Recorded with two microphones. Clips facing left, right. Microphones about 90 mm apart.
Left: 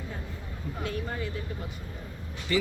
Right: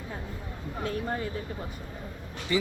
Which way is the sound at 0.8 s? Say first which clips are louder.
Right 3 dB; 40° right (ahead or behind).